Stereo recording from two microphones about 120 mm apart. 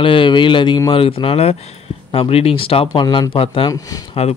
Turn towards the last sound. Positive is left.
turn(degrees=30)  # may be behind; listen again after turning